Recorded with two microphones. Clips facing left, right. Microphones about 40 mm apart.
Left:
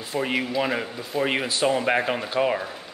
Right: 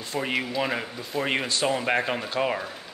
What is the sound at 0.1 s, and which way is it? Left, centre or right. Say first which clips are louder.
Speech: left 2 dB; centre.